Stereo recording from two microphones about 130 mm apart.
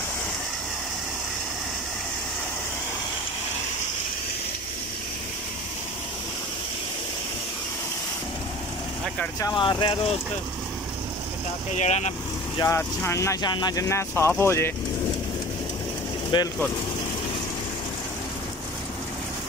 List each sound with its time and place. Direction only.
9.4 s speech: 35° left (ahead or behind)
11.7 s speech: 65° left (ahead or behind)
12.6 s speech: 20° left (ahead or behind)
16.3 s speech: 35° left (ahead or behind)